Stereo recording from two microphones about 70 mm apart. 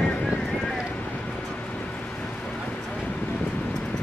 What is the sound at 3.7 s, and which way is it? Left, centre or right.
Vehicle, centre.